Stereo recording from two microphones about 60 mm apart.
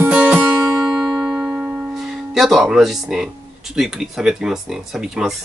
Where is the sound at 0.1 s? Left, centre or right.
Centre.